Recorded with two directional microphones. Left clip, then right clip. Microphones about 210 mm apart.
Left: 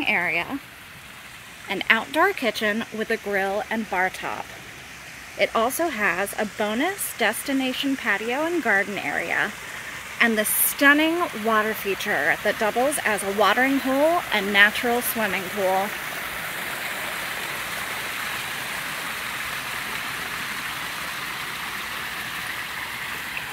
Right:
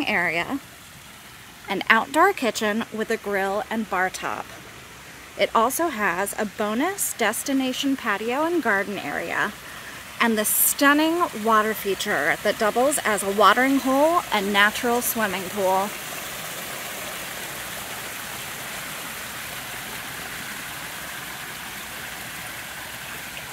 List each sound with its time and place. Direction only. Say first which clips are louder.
0.0 s speech: even; 20° right (ahead or behind)
1.7 s speech: right 2 dB; 20° right (ahead or behind)
5.4 s speech: right 1 dB; 15° right (ahead or behind)